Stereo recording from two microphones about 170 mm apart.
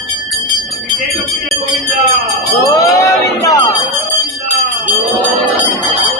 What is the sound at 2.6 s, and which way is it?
Crowd, 20° left (ahead or behind).